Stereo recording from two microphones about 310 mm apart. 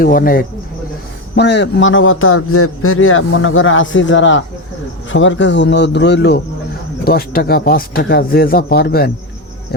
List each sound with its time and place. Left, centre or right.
0.0 s a man's voice: left